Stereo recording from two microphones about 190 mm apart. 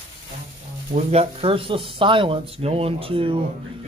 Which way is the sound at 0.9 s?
30° right (ahead or behind).